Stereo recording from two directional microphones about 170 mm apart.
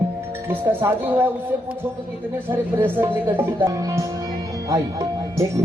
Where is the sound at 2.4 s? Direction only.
10° right (ahead or behind).